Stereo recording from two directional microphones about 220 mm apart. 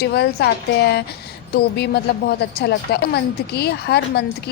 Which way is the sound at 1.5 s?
50° left (ahead or behind).